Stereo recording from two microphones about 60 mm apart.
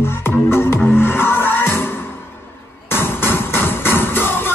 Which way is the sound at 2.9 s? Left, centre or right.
Left.